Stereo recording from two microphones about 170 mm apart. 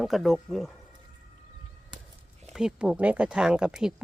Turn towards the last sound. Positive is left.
turn(degrees=-5)  # may be behind; listen again after turning